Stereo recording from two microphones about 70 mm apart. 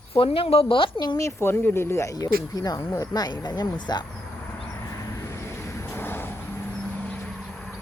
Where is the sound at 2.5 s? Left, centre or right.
Left.